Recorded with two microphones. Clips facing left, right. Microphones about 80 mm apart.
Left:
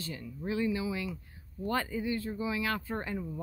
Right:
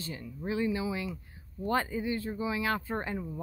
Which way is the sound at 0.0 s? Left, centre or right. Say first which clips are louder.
Even; right.